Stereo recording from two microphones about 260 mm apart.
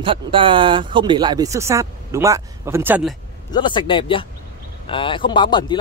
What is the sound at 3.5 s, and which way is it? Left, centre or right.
Speech, centre.